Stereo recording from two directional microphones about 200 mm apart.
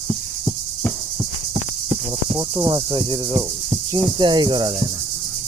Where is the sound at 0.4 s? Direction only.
Centre (ahead or behind).